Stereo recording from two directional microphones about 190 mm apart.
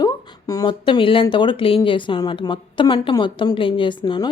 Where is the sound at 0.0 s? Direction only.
20° left (ahead or behind).